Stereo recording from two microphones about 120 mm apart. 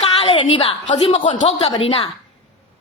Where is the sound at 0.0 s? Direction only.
50° left (ahead or behind).